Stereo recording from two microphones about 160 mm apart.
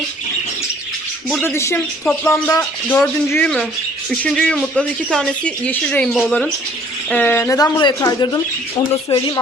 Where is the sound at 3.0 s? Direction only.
5° left (ahead or behind).